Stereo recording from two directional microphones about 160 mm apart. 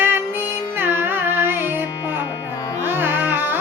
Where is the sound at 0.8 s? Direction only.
15° right (ahead or behind).